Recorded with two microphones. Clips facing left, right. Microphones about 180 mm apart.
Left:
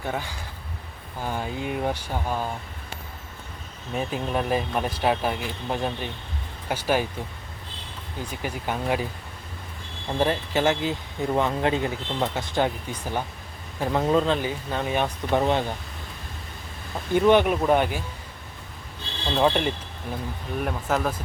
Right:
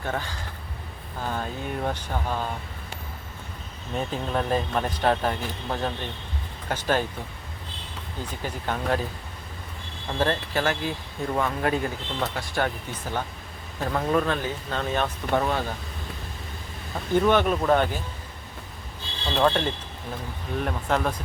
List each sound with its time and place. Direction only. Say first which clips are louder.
0.0 s speech: even; 10° left (ahead or behind)
3.9 s speech: left 1 dB; 10° left (ahead or behind)
8.3 s speech: left 1 dB; 10° left (ahead or behind)
10.2 s speech: left 2 dB; 15° left (ahead or behind)
17.2 s speech: left 2 dB; 15° left (ahead or behind)
19.4 s speech: left 1 dB; 15° left (ahead or behind)
20.6 s speech: even; 5° left (ahead or behind)